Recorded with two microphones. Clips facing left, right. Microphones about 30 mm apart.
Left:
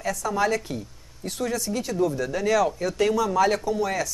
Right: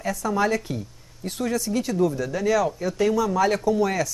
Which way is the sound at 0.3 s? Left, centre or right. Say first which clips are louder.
Right 1 dB; centre.